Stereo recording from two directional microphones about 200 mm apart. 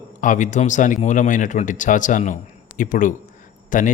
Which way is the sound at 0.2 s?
40° left (ahead or behind).